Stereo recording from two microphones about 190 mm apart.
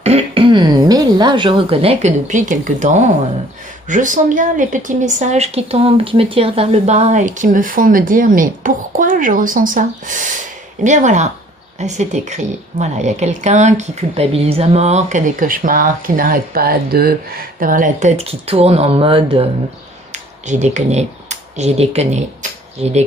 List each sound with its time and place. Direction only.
0.0 s a woman's voice: 30° right (ahead or behind)
20.1 s a woman's voice: 40° right (ahead or behind)